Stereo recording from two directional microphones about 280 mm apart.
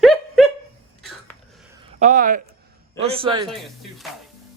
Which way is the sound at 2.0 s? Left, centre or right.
Right.